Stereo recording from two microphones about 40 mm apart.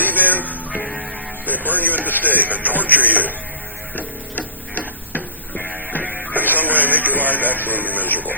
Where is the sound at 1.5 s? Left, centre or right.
Left.